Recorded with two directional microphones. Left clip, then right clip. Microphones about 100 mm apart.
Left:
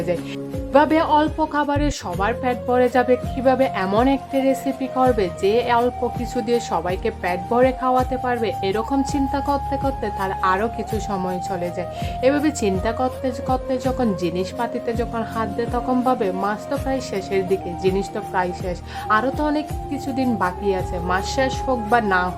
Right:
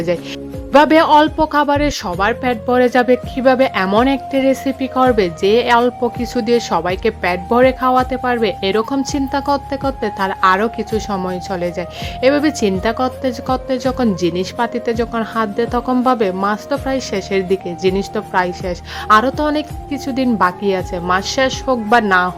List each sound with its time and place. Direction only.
0.7 s speech: 40° right (ahead or behind)